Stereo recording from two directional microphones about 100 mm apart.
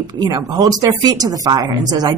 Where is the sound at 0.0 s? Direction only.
45° right (ahead or behind).